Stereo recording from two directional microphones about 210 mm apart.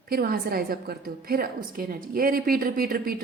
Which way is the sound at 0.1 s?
45° right (ahead or behind).